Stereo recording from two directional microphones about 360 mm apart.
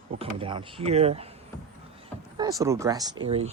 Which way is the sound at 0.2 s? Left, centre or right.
Centre.